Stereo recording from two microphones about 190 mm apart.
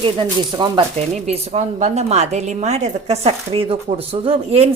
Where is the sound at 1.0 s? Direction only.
35° right (ahead or behind).